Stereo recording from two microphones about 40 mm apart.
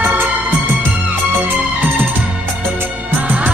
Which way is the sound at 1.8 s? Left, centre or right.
Right.